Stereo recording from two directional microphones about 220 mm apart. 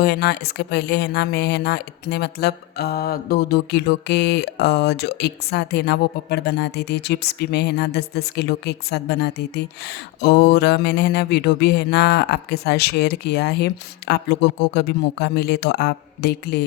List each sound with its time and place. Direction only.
0.0 s speech: 50° left (ahead or behind)